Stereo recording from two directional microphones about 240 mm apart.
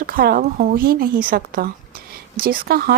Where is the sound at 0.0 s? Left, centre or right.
Right.